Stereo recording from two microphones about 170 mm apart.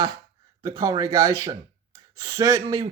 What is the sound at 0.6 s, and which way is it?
Speech, 20° right (ahead or behind).